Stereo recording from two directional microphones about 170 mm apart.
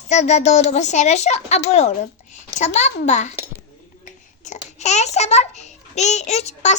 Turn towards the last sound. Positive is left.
turn(degrees=40)  # may be behind; listen again after turning